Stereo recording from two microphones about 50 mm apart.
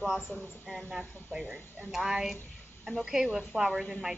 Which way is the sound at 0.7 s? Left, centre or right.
Centre.